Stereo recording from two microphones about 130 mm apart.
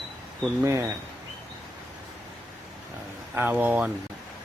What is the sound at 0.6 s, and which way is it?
Speech, 20° right (ahead or behind).